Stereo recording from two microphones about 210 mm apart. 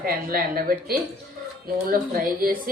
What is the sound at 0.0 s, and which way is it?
A woman's voice, 45° right (ahead or behind).